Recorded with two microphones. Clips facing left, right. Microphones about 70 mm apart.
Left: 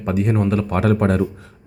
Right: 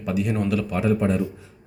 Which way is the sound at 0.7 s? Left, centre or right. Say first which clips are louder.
Left 4 dB; left.